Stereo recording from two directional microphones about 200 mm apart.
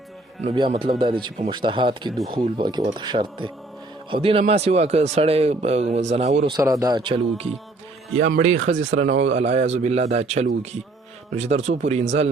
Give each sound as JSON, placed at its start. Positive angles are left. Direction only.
{"t": 0.4, "sound": "a man's voice", "side_deg": -30}
{"t": 6.4, "sound": "a man's voice", "side_deg": -20}